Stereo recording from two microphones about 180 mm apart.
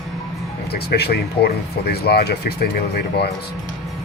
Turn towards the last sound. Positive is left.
turn(degrees=60)  # may be behind; listen again after turning